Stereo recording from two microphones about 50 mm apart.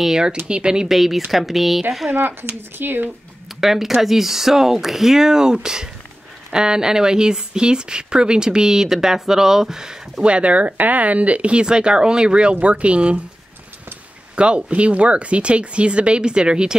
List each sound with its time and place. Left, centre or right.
0.0 s speech: centre
0.9 s speech: centre
2.0 s speech: right
3.6 s speech: centre; by 13.2 s right
14.3 s speech: right